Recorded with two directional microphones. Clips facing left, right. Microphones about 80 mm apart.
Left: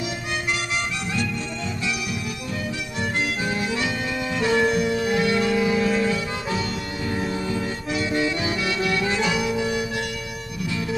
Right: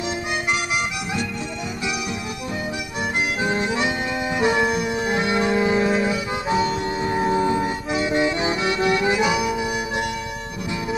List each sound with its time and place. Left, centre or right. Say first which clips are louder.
3.4 s music: right 3 dB; right